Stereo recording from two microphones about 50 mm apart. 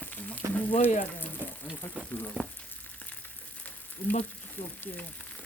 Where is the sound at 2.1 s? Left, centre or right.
Left.